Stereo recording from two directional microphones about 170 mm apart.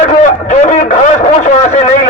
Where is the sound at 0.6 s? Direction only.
45° left (ahead or behind).